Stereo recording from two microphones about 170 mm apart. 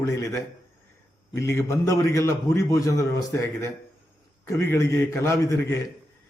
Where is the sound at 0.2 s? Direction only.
20° left (ahead or behind).